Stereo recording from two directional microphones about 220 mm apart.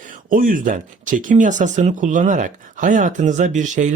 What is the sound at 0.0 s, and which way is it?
Speech, 40° right (ahead or behind).